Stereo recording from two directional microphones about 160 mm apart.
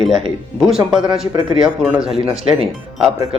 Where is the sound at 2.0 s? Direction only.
35° right (ahead or behind).